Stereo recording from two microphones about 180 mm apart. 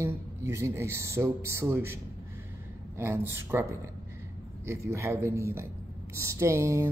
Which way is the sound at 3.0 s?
15° right (ahead or behind).